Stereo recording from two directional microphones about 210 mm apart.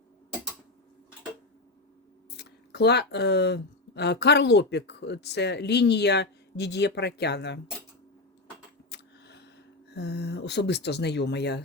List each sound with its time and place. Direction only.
2.3 s speech: 50° left (ahead or behind)
8.9 s a sound: 55° left (ahead or behind)
9.9 s speech: 55° left (ahead or behind)